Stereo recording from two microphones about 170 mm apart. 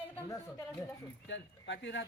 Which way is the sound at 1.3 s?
90° left.